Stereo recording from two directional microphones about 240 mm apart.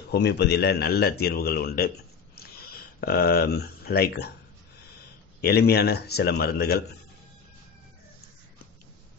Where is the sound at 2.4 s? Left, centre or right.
Left.